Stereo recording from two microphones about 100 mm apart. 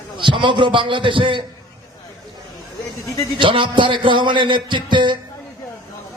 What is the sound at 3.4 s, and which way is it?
A man's voice, 55° right (ahead or behind).